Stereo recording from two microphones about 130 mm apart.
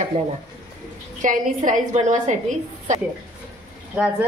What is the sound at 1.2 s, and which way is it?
A woman's voice, 80° right.